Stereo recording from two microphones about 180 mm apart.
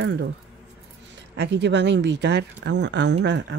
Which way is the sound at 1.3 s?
75° right (ahead or behind).